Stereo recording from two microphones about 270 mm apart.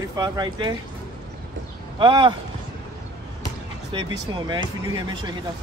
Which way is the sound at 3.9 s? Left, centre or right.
Centre.